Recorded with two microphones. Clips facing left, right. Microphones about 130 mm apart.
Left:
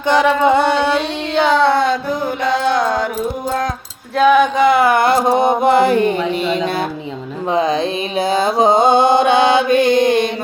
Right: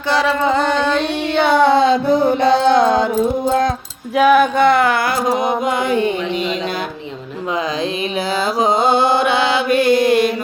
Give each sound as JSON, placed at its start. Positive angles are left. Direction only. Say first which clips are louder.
{"t": 0.1, "sound": "female singing", "louder": "left 3 dB", "side_deg": 15}
{"t": 1.5, "sound": "music", "louder": "right 2 dB", "side_deg": -15}
{"t": 4.2, "sound": "speech", "louder": "even", "side_deg": -5}
{"t": 4.9, "sound": "music", "louder": "left 4 dB", "side_deg": 25}
{"t": 8.4, "sound": "mantra", "louder": "left 3 dB", "side_deg": 25}